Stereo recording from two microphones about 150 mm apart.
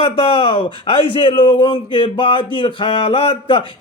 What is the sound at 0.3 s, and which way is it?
Speech, 35° left (ahead or behind).